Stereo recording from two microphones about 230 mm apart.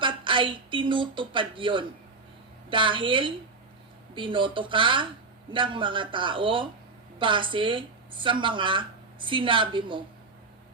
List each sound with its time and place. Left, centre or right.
0.0 s speech: right